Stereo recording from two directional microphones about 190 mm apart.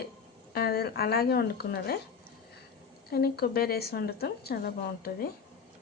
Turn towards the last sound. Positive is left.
turn(degrees=55)  # may be behind; listen again after turning